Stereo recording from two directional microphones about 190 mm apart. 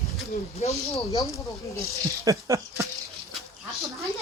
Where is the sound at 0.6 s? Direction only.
35° left (ahead or behind).